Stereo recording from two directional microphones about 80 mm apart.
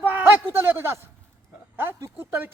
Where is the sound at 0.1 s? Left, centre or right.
Right.